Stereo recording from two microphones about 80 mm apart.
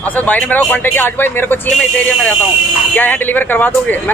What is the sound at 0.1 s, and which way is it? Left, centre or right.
Speech, centre.